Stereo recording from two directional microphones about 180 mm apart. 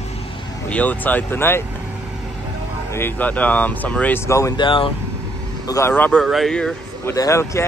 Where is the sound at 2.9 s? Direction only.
10° left (ahead or behind); by 4.9 s 30° left (ahead or behind).